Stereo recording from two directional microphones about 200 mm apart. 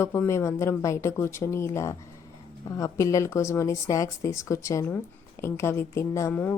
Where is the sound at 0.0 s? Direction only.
15° left (ahead or behind).